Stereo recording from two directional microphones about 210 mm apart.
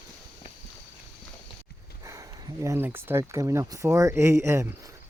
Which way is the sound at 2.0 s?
15° right (ahead or behind).